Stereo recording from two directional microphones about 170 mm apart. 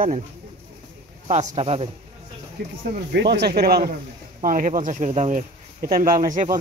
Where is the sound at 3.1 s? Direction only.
80° right.